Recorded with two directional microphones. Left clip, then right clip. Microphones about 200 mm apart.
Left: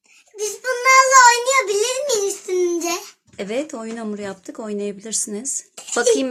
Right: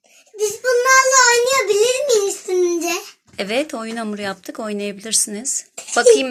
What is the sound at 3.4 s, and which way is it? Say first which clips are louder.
Speech: right 4 dB; 10° left (ahead or behind).